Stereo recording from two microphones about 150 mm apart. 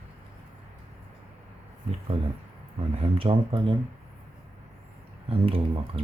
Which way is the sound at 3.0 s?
40° right (ahead or behind).